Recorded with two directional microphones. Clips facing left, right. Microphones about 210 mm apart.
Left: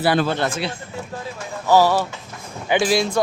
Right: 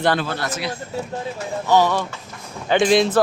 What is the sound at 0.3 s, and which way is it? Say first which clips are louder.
Speech: left 3 dB; 30° left (ahead or behind).